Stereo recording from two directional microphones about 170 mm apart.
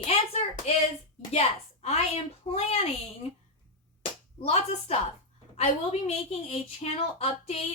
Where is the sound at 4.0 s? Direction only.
35° left (ahead or behind).